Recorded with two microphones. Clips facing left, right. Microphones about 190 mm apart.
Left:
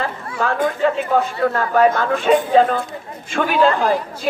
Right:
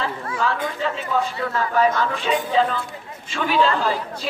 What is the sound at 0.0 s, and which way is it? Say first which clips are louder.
A woman's voice: left 2 dB; 50° left (ahead or behind).